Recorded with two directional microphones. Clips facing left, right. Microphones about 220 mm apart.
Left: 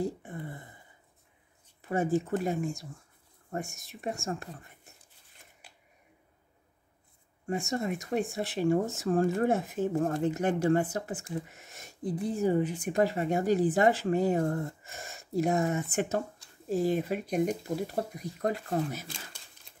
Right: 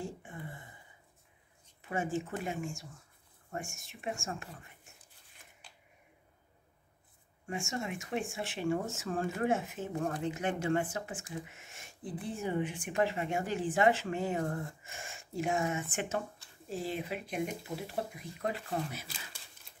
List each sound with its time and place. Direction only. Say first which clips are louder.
0.0 s a sound: left 8 dB; 40° left (ahead or behind)
1.8 s speech: left 6 dB; 40° left (ahead or behind)
7.4 s speech: left 6 dB; 40° left (ahead or behind)